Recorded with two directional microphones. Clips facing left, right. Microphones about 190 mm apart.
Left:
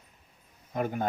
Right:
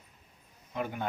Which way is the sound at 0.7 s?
45° left (ahead or behind).